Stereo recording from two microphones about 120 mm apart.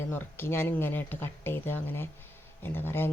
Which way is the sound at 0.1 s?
15° left (ahead or behind).